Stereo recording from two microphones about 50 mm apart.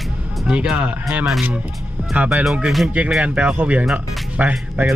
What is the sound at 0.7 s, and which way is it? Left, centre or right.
Speech, right.